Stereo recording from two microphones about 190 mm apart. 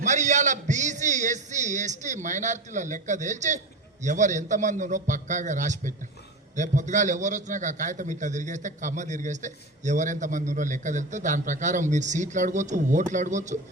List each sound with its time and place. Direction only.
0.0 s a man's voice: 40° right (ahead or behind)